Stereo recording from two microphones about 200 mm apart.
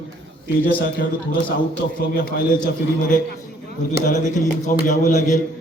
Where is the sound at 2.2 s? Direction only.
45° left (ahead or behind).